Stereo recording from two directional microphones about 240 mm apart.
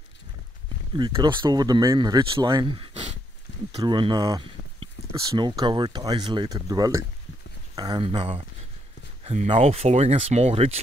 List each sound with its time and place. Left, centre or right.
0.9 s speech: centre